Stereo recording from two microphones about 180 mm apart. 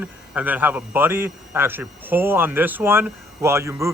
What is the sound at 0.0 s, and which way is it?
A man's voice, 10° right (ahead or behind).